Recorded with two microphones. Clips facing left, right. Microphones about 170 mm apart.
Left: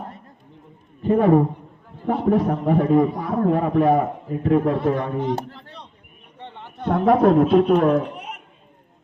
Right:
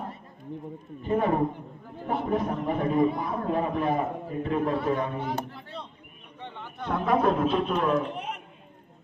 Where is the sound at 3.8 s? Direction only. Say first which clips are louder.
Left 8 dB; 45° left (ahead or behind).